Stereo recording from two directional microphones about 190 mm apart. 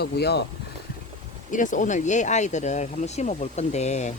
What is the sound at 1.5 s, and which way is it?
Speech, 40° left (ahead or behind).